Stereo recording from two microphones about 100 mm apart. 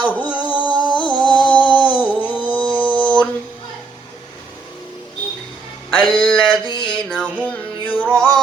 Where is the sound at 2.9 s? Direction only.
55° left (ahead or behind).